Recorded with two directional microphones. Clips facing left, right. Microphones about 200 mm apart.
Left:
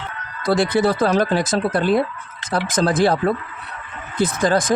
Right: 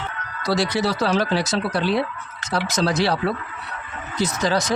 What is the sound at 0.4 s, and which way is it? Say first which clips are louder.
Speech: left 4 dB; 55° left (ahead or behind).